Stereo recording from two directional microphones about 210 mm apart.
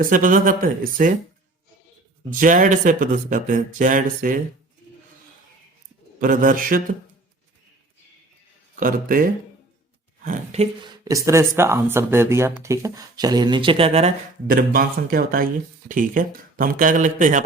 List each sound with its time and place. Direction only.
0.0 s speech: 40° right (ahead or behind)
2.4 s speech: 40° right (ahead or behind)
6.1 s speech: 40° right (ahead or behind)
8.8 s speech: 40° right (ahead or behind)
11.0 s speech: 15° right (ahead or behind); by 17.4 s 35° right (ahead or behind)